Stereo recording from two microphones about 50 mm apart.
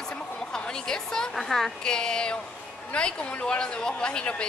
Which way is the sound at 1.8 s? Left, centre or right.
Centre.